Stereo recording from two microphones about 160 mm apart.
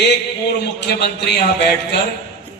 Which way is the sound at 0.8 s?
90° left.